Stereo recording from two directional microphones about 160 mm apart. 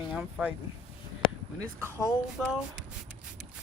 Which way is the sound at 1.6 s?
15° right (ahead or behind).